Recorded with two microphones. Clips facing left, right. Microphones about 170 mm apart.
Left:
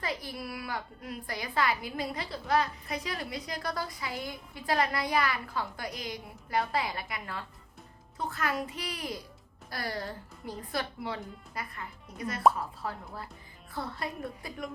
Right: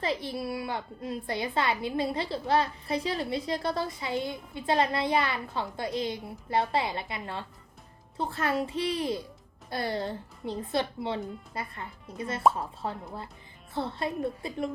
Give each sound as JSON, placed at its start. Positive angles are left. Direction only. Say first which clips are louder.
{"t": 0.0, "sound": "a woman's voice", "louder": "right 5 dB", "side_deg": -25}